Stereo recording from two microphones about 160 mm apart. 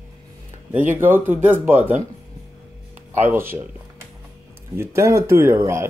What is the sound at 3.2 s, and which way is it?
Speech, 15° right (ahead or behind).